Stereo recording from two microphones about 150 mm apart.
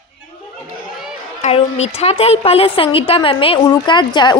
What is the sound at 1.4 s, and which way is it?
A woman's voice, 45° left (ahead or behind).